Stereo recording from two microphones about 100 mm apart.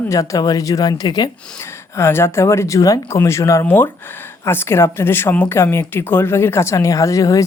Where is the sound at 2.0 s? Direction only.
25° left (ahead or behind).